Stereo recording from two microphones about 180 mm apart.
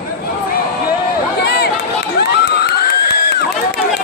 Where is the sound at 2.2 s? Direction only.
65° left (ahead or behind).